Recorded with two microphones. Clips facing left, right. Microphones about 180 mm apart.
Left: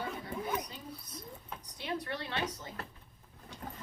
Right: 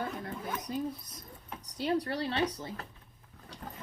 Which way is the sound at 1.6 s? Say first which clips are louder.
Right 8 dB; 40° right (ahead or behind).